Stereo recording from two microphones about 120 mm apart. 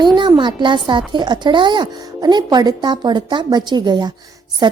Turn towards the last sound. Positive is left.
turn(degrees=-35)  # may be behind; listen again after turning